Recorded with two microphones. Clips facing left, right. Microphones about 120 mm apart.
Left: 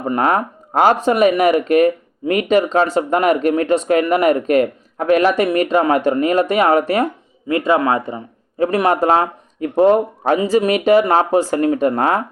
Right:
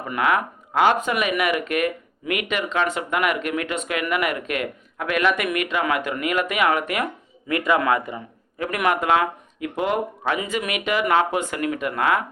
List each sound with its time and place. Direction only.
0.0 s speech: 35° left (ahead or behind)